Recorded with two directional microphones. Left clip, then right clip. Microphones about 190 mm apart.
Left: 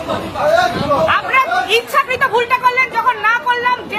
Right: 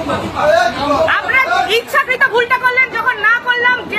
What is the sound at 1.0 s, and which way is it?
Chatter, 15° left (ahead or behind).